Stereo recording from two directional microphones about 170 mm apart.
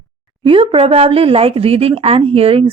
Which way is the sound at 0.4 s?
30° right (ahead or behind).